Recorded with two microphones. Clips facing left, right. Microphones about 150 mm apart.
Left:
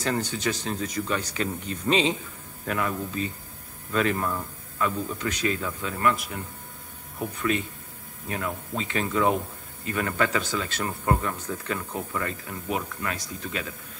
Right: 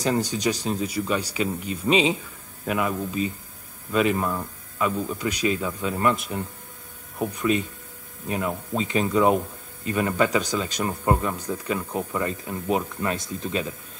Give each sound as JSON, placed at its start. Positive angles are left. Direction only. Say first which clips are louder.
{"t": 0.0, "sound": "a man's voice", "louder": "right 4 dB", "side_deg": -15}